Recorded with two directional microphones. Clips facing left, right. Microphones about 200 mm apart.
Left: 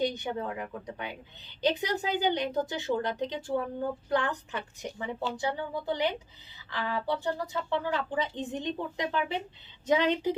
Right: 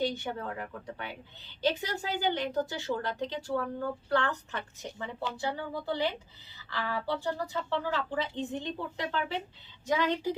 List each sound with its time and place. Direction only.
0.0 s a woman's voice: 20° left (ahead or behind)